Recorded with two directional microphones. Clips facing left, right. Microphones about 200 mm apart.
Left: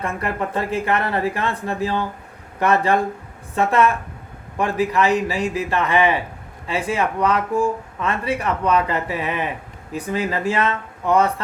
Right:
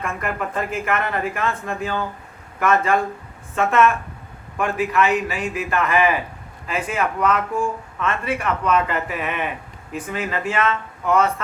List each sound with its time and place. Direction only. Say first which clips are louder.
0.0 s speech: left 2 dB; 30° left (ahead or behind)